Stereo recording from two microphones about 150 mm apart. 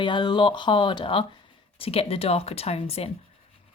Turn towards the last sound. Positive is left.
turn(degrees=40)  # may be behind; listen again after turning